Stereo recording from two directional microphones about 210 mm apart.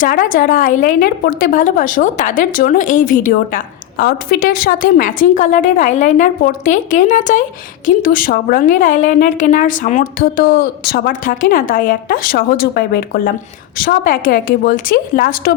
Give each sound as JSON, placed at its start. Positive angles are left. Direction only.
{"t": 0.0, "sound": "a woman's voice", "side_deg": 40}